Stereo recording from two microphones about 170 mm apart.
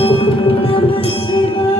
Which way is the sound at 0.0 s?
35° left (ahead or behind).